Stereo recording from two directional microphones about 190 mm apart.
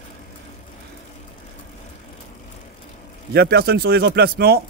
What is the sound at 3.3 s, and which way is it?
Speech, 60° right (ahead or behind).